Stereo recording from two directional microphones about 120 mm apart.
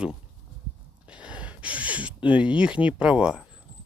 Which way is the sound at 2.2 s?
10° right (ahead or behind).